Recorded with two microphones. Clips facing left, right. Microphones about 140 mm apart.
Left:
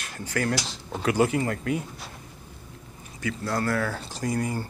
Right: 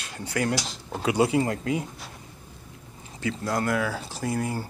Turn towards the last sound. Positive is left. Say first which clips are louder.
# even
turn(degrees=-5)  # may be behind; listen again after turning